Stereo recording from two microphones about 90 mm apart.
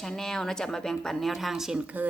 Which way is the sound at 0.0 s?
5° left (ahead or behind).